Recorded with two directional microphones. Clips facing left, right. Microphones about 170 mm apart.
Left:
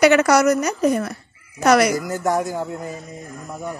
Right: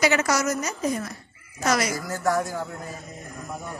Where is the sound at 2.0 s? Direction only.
20° left (ahead or behind).